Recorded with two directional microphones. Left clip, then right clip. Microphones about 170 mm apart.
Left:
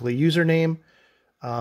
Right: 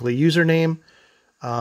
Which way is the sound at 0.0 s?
15° right (ahead or behind).